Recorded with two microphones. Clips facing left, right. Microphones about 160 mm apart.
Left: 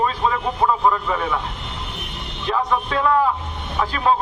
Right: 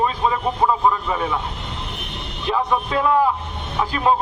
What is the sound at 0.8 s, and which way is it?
Speech, 10° right (ahead or behind).